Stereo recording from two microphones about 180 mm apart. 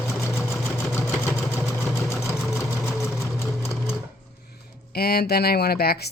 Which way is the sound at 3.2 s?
15° left (ahead or behind).